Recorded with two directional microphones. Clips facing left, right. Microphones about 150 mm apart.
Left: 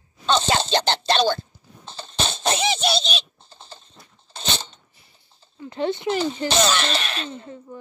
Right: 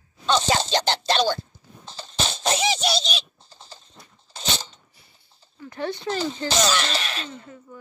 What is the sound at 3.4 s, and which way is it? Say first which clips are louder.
Bird: left 2 dB; 25° left (ahead or behind).